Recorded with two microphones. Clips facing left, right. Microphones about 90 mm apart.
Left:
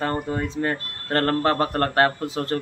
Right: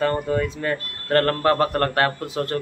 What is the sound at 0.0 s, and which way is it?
Speech, 30° left (ahead or behind).